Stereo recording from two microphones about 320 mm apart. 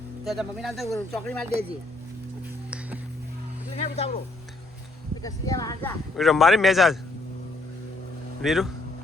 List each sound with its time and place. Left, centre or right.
0.3 s speech: centre
3.8 s music: centre
5.2 s speech: centre
8.4 s speech: centre